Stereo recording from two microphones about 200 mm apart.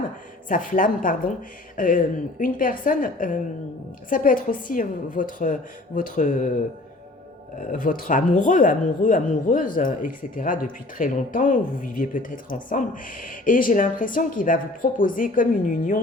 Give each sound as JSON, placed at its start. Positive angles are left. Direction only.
{"t": 0.4, "sound": "speech", "side_deg": 40}
{"t": 7.7, "sound": "speech", "side_deg": 45}